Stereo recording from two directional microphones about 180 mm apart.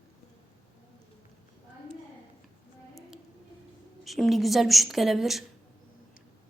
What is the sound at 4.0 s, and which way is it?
Speech, centre (ahead or behind).